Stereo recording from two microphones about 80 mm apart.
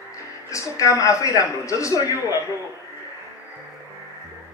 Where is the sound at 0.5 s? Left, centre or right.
Left.